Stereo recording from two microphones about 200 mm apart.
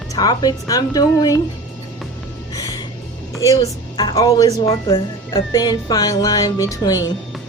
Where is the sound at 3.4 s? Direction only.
15° left (ahead or behind).